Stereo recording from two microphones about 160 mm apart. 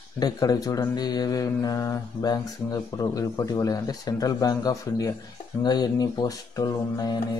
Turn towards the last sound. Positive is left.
turn(degrees=20)  # may be behind; listen again after turning